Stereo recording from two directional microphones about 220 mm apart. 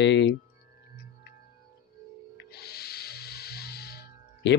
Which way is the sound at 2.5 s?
45° left (ahead or behind).